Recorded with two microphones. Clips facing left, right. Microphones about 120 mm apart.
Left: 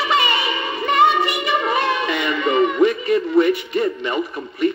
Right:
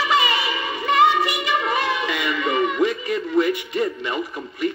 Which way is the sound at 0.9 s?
30° left (ahead or behind).